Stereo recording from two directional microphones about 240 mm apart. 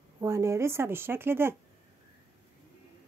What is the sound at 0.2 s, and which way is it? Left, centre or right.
Speech, centre.